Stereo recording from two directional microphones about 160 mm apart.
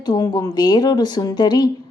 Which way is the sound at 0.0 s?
25° left (ahead or behind).